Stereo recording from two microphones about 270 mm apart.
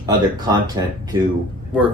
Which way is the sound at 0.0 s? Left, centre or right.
Centre.